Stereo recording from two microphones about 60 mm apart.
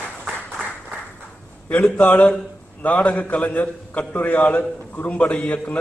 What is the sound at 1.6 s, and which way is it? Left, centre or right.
A man's voice, left.